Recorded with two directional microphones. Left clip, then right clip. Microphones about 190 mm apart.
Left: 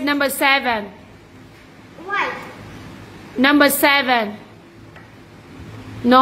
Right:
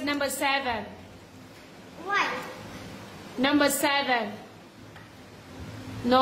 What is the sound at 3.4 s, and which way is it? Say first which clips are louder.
Speech: left 10 dB; 30° left (ahead or behind).